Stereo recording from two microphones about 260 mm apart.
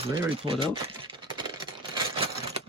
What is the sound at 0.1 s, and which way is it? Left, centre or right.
Typewriter, centre.